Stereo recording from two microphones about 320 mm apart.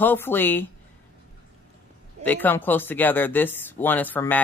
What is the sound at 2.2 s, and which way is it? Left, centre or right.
Speech, centre.